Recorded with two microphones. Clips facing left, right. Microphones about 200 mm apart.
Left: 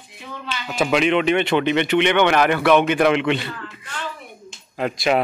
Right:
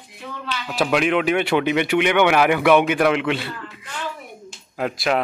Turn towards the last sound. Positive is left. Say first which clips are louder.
# left 2 dB
turn(degrees=0)  # may be behind; listen again after turning